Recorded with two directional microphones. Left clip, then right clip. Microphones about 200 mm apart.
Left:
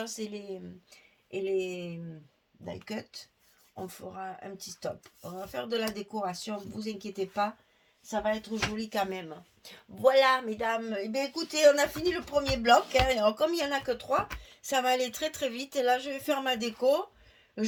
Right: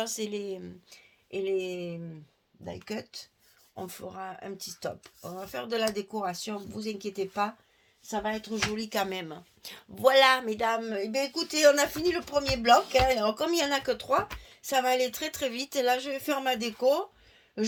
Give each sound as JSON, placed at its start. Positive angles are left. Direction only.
{"t": 0.0, "sound": "speech", "side_deg": -40}